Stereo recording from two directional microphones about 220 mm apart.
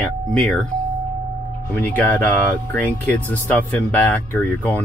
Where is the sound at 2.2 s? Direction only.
10° left (ahead or behind).